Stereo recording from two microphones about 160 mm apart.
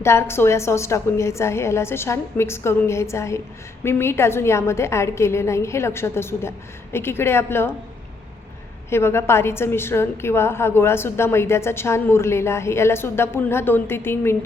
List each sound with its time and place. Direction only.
0.0 s a woman's voice: 15° left (ahead or behind)
8.9 s a woman's voice: 15° left (ahead or behind)